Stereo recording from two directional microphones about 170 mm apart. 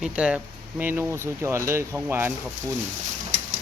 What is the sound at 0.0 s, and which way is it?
Speech, 5° right (ahead or behind).